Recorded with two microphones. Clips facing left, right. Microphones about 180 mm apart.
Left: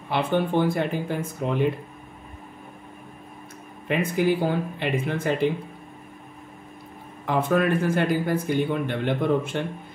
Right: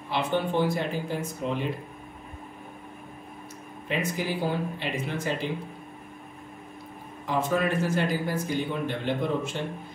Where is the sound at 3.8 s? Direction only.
55° left (ahead or behind).